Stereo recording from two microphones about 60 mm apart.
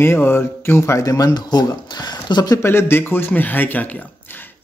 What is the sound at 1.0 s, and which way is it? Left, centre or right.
Speech, left.